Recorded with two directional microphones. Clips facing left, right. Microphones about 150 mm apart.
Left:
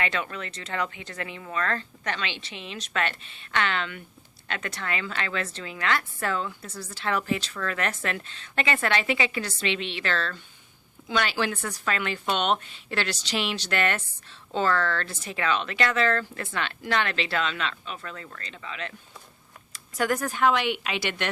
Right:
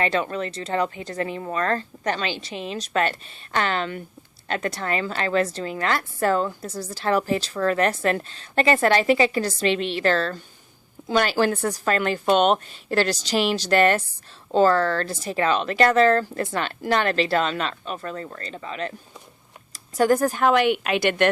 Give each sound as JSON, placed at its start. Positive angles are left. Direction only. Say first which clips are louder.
{"t": 0.0, "sound": "a woman's voice", "louder": "right 7 dB", "side_deg": -35}